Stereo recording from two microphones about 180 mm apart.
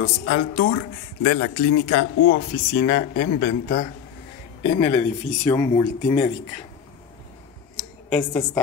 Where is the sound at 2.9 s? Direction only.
55° left (ahead or behind).